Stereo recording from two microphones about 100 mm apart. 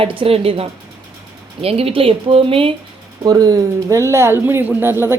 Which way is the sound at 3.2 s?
40° right (ahead or behind).